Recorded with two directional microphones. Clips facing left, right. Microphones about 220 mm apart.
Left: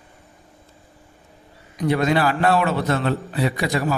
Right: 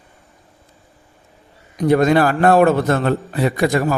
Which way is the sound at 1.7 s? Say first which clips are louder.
Right 6 dB; 45° right (ahead or behind).